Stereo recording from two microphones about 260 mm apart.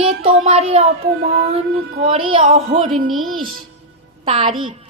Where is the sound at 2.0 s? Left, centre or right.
Centre.